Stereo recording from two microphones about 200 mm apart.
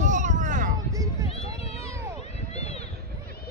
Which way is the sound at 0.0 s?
40° right (ahead or behind).